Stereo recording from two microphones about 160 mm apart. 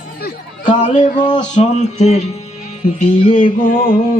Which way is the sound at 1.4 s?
50° left (ahead or behind).